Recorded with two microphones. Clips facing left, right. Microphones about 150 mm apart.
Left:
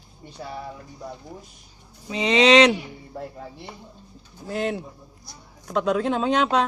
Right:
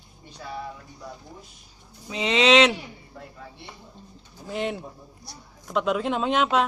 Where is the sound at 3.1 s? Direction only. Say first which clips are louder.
Left 7 dB; 40° left (ahead or behind).